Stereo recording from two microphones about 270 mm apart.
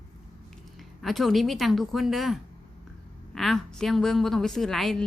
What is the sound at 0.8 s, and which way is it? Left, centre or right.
A woman's voice, centre.